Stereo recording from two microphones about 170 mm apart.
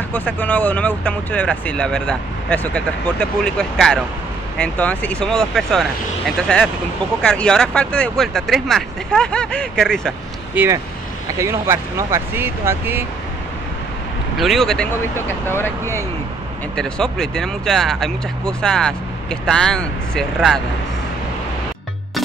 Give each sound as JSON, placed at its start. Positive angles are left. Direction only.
{"t": 0.1, "sound": "speech", "side_deg": 10}
{"t": 10.5, "sound": "speech", "side_deg": -10}
{"t": 14.4, "sound": "speech", "side_deg": 0}
{"t": 15.1, "sound": "speech", "side_deg": 15}
{"t": 16.7, "sound": "speech", "side_deg": 5}